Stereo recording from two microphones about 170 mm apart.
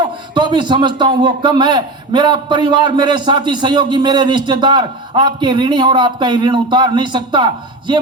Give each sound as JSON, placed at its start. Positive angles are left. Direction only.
{"t": 0.3, "sound": "a man's voice", "side_deg": -25}